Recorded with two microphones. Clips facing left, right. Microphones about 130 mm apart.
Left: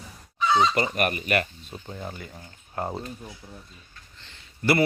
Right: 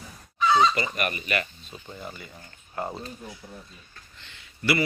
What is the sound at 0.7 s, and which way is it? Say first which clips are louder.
Speech: left 4 dB; 50° left (ahead or behind).